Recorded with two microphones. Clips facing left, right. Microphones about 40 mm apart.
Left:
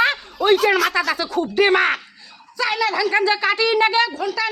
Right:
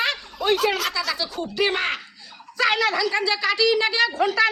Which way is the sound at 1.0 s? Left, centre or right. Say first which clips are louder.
Left 6 dB; left.